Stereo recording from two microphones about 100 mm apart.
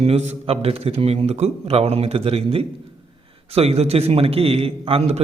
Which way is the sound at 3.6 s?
90° right.